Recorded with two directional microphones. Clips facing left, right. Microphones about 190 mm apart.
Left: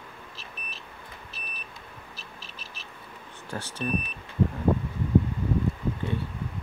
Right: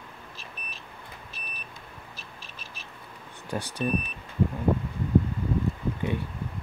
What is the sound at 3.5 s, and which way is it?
Speech, 15° right (ahead or behind).